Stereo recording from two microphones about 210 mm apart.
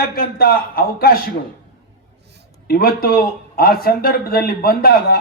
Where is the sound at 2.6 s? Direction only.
45° left (ahead or behind).